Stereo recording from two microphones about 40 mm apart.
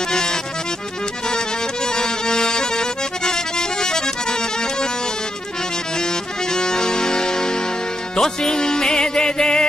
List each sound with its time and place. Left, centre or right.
0.1 s music: centre
1.9 s accordion: centre
6.5 s music: centre